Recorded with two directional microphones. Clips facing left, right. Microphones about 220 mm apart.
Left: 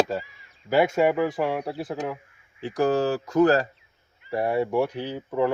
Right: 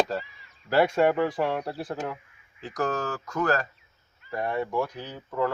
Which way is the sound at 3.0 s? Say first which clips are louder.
Left 8 dB; 15° left (ahead or behind).